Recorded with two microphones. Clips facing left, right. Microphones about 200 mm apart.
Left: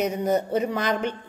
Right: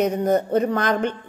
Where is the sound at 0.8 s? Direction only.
50° right (ahead or behind).